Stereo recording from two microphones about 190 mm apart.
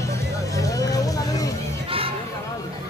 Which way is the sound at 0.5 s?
15° left (ahead or behind).